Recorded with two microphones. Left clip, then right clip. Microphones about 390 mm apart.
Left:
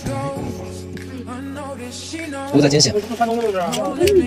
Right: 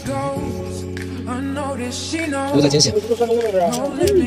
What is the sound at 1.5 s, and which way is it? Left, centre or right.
Music, right.